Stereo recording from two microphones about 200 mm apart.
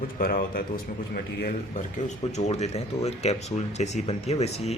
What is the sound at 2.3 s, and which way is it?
Speech, 35° left (ahead or behind).